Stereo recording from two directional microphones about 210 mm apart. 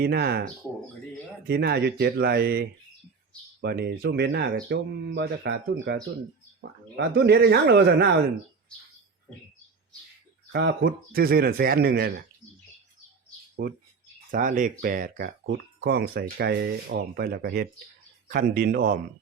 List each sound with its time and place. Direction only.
0.0 s speech: 50° right (ahead or behind)
1.5 s speech: 50° right (ahead or behind)
10.5 s speech: 50° right (ahead or behind)
13.6 s speech: 50° right (ahead or behind)